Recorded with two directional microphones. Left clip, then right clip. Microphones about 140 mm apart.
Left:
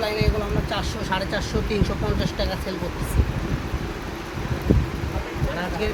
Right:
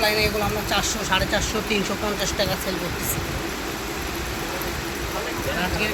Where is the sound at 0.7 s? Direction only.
20° left (ahead or behind).